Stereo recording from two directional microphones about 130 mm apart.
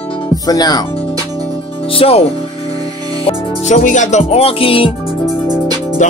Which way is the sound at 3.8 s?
70° left (ahead or behind).